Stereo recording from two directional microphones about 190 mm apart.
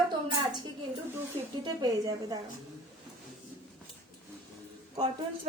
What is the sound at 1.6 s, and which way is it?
Speech, 20° right (ahead or behind).